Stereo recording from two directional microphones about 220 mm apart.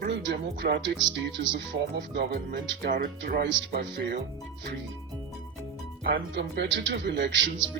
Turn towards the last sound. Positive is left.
turn(degrees=-55)  # may be behind; listen again after turning